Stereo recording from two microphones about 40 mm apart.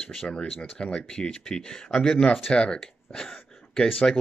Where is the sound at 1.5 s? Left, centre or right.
Centre; by 2.8 s left.